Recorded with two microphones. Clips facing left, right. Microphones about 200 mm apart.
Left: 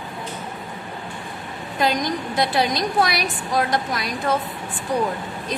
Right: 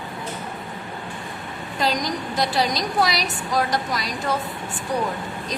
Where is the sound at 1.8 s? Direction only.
55° left (ahead or behind).